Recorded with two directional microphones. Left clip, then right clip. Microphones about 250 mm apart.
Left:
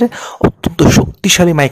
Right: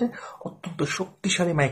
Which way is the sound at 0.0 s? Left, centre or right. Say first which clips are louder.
Left 17 dB; left.